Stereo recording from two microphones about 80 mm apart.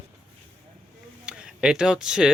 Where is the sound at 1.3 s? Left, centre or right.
Centre.